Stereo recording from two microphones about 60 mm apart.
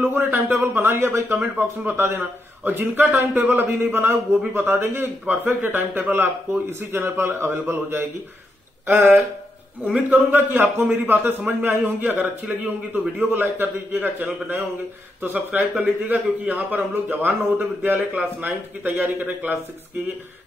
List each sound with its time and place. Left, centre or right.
0.0 s speech: right
0.9 s speech: right
1.3 s a man's voice: right
15.8 s a man's voice: right